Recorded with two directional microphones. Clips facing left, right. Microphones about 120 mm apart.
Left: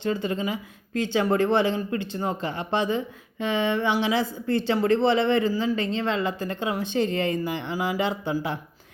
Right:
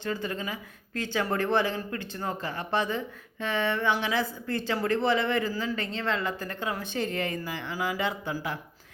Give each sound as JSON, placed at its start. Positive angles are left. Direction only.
{"t": 0.0, "sound": "speech", "side_deg": 20}